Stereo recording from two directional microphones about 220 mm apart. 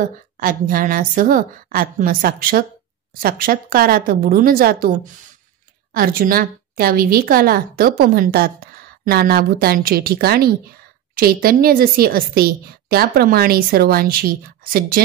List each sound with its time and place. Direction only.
0.4 s a woman's voice: 40° right (ahead or behind)
5.9 s a woman's voice: 40° right (ahead or behind)